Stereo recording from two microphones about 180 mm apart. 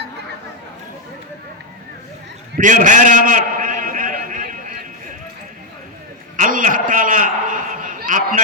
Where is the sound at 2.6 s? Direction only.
45° right (ahead or behind).